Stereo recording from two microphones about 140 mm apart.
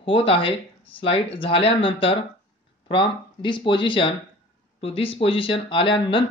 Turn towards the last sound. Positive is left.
turn(degrees=35)  # may be behind; listen again after turning